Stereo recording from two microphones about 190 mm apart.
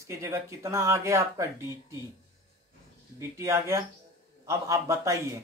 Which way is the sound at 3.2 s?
15° right (ahead or behind).